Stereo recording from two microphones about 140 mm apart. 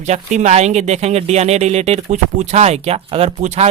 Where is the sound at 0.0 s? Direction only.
55° right (ahead or behind).